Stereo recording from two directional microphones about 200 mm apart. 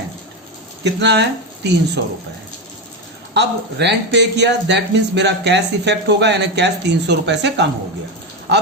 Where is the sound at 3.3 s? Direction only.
60° right (ahead or behind).